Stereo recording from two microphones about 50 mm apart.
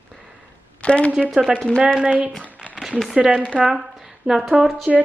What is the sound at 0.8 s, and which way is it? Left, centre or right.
Speech, left.